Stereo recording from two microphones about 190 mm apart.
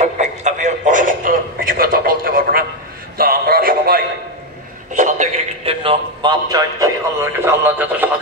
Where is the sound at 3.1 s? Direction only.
50° right (ahead or behind).